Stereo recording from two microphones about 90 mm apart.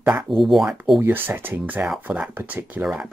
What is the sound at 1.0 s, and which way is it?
Speech, 25° right (ahead or behind).